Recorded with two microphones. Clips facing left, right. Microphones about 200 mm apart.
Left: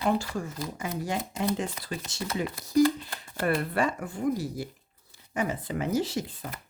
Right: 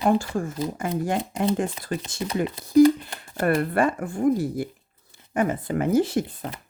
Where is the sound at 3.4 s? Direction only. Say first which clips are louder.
Right 5 dB; 55° right (ahead or behind).